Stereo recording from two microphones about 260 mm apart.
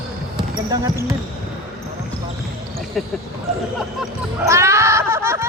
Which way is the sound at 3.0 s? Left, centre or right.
Centre.